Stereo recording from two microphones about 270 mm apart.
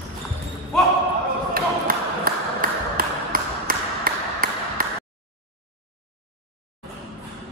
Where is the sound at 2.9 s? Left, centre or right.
Right.